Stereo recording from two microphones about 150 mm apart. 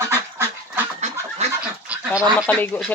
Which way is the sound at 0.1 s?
15° right (ahead or behind).